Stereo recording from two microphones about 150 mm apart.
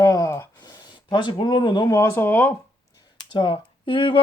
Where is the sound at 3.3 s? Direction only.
35° left (ahead or behind).